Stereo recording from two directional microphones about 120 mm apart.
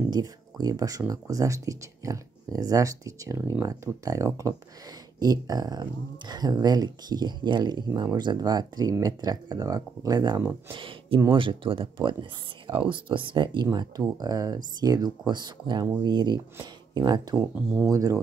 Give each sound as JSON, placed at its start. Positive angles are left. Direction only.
{"t": 0.1, "sound": "speech", "side_deg": -30}
{"t": 10.7, "sound": "speech", "side_deg": -45}
{"t": 17.6, "sound": "speech", "side_deg": -5}
{"t": 17.9, "sound": "speech", "side_deg": -30}